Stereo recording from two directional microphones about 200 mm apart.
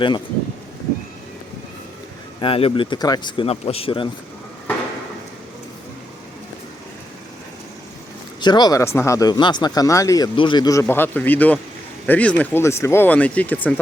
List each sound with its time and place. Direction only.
2.4 s speech: 30° left (ahead or behind)
8.4 s speech: 20° left (ahead or behind)